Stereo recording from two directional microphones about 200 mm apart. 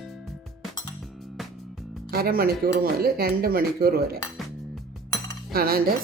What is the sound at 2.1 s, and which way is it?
Speech, 50° right (ahead or behind).